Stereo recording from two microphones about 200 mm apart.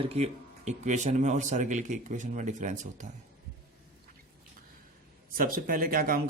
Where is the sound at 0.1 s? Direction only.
35° right (ahead or behind).